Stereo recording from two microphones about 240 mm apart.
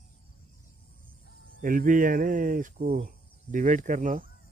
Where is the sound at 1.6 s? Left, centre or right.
Right.